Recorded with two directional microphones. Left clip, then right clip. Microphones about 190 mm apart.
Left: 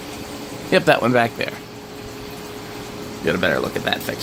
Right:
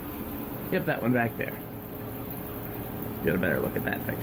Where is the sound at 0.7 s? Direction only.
40° left (ahead or behind).